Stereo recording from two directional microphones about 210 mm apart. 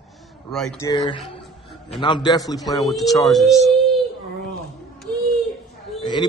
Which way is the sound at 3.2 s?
Centre (ahead or behind).